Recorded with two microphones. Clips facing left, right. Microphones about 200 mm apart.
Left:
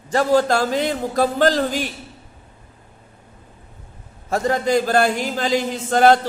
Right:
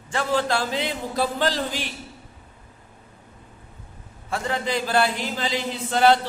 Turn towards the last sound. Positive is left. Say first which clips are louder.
# left 4 dB
turn(degrees=45)  # may be behind; listen again after turning